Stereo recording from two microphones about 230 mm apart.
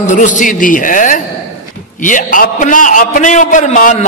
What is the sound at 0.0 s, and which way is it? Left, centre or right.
A man's voice, left.